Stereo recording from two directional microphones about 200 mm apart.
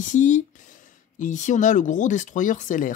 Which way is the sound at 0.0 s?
35° left (ahead or behind).